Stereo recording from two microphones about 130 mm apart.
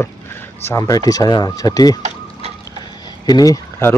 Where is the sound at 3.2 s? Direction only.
30° left (ahead or behind).